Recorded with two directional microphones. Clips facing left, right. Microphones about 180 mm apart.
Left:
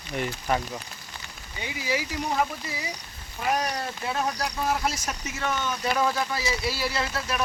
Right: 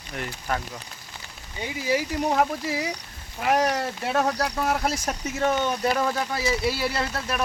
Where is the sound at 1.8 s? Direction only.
50° right (ahead or behind).